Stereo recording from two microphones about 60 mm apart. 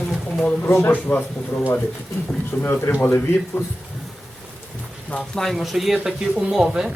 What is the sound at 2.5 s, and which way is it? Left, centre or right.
Speech, left.